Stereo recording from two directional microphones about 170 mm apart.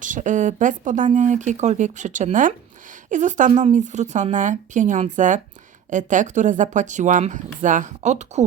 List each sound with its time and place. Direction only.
0.0 s speech: 50° right (ahead or behind)